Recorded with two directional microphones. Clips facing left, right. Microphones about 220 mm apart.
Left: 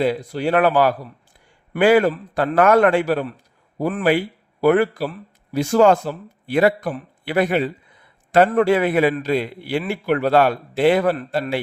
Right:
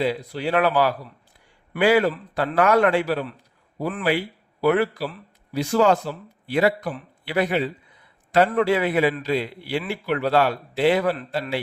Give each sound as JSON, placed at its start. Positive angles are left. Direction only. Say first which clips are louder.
{"t": 0.0, "sound": "a man's voice", "louder": "left 4 dB", "side_deg": 50}